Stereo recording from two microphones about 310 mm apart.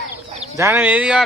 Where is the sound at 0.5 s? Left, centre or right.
Centre.